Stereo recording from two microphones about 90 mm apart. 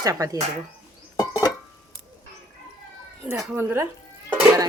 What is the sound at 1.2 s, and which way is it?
Music, 50° left (ahead or behind).